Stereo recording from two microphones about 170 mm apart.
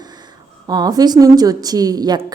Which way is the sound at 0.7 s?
25° right (ahead or behind).